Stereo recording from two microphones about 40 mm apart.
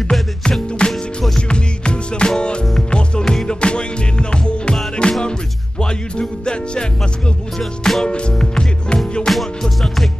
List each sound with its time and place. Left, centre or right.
0.4 s music: left
7.5 s music: centre
8.0 s music: left
9.3 s music: centre